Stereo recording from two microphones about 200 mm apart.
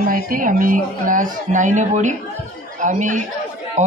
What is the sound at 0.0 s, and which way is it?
Speech, 45° right (ahead or behind).